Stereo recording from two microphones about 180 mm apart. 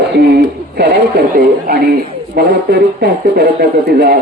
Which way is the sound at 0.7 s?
60° right (ahead or behind).